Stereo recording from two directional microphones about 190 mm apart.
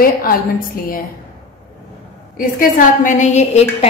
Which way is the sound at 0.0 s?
50° left (ahead or behind).